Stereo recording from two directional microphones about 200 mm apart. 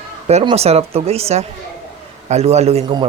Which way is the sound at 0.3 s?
30° right (ahead or behind).